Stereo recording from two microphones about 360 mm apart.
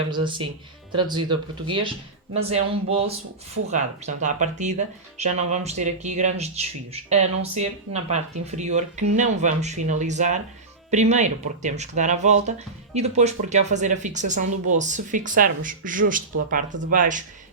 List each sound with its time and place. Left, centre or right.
0.1 s speech: centre